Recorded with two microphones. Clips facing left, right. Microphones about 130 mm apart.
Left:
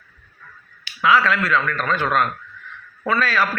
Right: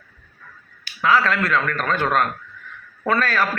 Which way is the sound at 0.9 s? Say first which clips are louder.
Left 1 dB; 40° right (ahead or behind).